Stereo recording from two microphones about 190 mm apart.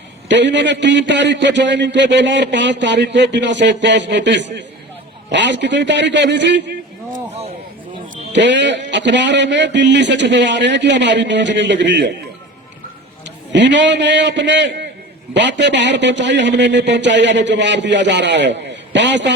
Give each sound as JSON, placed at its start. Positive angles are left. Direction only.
{"t": 0.3, "sound": "a man's voice", "side_deg": -70}
{"t": 7.1, "sound": "a sound", "side_deg": -35}
{"t": 8.3, "sound": "a man's voice", "side_deg": -70}
{"t": 13.5, "sound": "a man's voice", "side_deg": -70}